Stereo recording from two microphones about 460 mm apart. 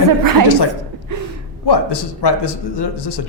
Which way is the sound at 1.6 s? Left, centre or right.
Left.